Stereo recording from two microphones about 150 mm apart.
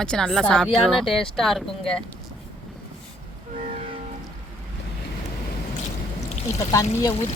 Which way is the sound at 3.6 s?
45° right (ahead or behind).